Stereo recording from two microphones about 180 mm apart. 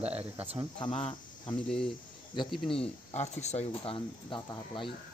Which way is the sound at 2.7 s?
35° left (ahead or behind).